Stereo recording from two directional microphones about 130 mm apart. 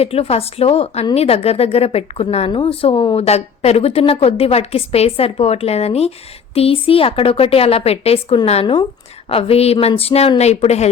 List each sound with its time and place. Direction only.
0.0 s a woman's voice: 50° left (ahead or behind)
8.6 s a woman's voice: 35° left (ahead or behind)
9.3 s a woman's voice: 50° left (ahead or behind)